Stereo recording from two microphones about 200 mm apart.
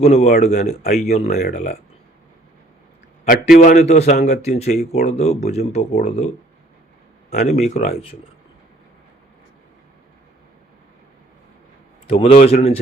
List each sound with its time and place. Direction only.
0.0 s speech: 35° left (ahead or behind)
3.2 s speech: 45° left (ahead or behind)
12.0 s speech: 30° left (ahead or behind)